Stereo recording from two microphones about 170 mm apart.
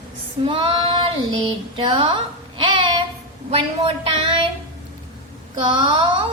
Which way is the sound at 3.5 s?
35° right (ahead or behind).